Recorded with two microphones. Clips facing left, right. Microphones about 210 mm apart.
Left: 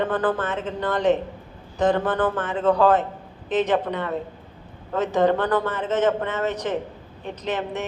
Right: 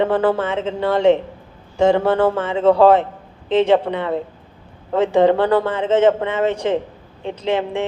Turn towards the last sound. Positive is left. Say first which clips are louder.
# right 7 dB
turn(degrees=-25)  # may be behind; listen again after turning